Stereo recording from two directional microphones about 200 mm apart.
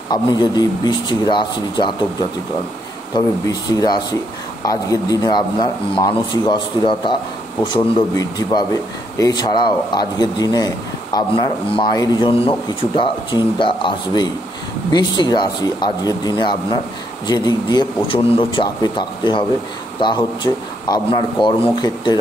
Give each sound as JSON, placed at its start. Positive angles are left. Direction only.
{"t": 0.1, "sound": "a man's voice", "side_deg": 20}
{"t": 3.2, "sound": "a man's voice", "side_deg": 20}